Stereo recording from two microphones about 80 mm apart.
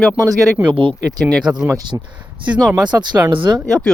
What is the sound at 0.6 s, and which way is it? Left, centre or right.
Speech, right.